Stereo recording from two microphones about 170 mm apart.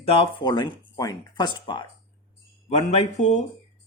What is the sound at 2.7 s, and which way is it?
Speech, 40° left (ahead or behind).